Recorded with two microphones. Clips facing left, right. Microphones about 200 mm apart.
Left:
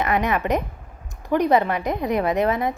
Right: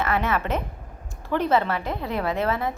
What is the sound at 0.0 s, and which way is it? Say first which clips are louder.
A woman's voice: left 3 dB; 15° left (ahead or behind).